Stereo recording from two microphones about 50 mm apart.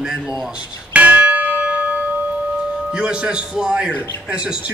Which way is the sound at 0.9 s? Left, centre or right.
Right.